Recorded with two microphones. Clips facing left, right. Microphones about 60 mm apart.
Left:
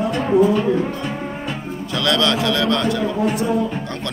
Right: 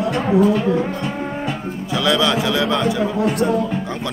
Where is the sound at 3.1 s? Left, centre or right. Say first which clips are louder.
Right 1 dB; right.